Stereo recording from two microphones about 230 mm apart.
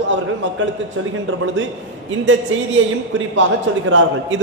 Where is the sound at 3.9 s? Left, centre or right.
Right.